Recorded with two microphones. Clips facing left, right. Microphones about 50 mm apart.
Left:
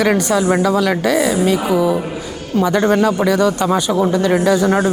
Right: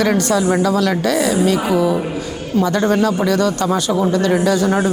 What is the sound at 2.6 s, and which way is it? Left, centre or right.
A woman's voice, centre.